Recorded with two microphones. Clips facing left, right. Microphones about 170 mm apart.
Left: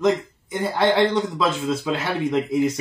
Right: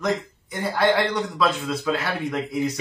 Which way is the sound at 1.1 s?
25° left (ahead or behind).